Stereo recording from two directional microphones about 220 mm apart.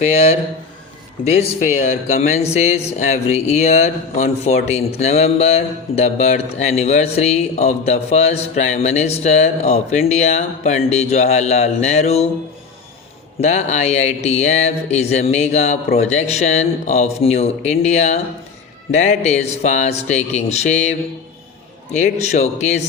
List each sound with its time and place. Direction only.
0.0 s speech: 30° left (ahead or behind)
13.4 s speech: 30° left (ahead or behind)
21.9 s speech: 30° left (ahead or behind)